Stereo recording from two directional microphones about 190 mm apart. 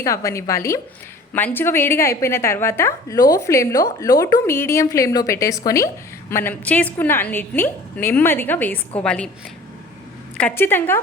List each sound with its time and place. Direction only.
0.0 s a woman's voice: 15° left (ahead or behind)
10.3 s a woman's voice: 10° left (ahead or behind)